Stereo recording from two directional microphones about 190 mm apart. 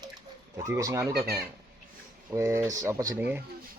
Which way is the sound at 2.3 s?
15° right (ahead or behind).